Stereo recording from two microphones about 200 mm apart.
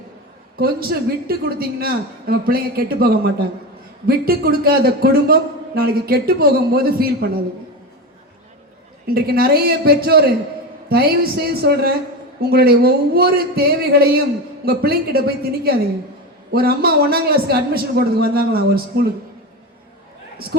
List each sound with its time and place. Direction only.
0.5 s a man's voice: 50° right (ahead or behind)
9.0 s a man's voice: 50° right (ahead or behind)
16.5 s a man's voice: 50° right (ahead or behind)